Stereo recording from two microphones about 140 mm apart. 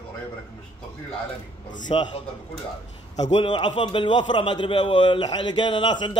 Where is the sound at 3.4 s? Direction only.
35° left (ahead or behind).